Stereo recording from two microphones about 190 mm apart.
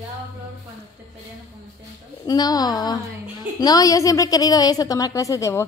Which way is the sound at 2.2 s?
20° left (ahead or behind).